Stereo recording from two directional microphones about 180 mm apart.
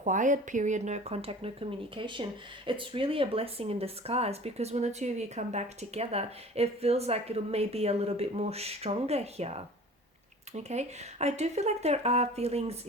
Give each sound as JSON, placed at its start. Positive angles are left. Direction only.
{"t": 0.0, "sound": "speech", "side_deg": -45}